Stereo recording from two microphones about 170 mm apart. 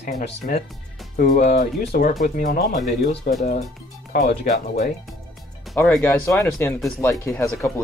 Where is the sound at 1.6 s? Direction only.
50° left (ahead or behind).